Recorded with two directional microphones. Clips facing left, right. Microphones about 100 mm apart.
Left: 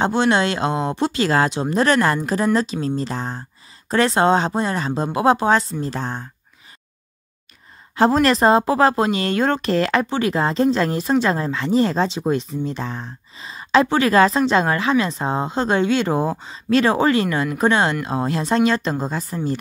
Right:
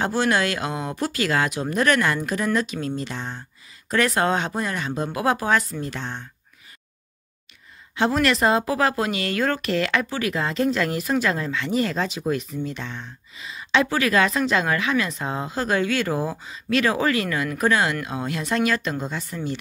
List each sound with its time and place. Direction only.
0.0 s speech: 25° left (ahead or behind); by 6.2 s 40° left (ahead or behind)
7.9 s speech: 35° left (ahead or behind)